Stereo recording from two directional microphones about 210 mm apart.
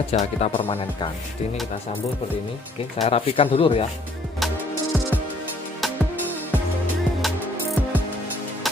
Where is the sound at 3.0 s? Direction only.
30° left (ahead or behind).